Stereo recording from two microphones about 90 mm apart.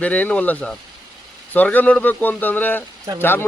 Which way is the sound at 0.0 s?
15° left (ahead or behind).